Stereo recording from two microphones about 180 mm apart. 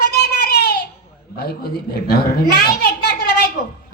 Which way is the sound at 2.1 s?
65° left (ahead or behind).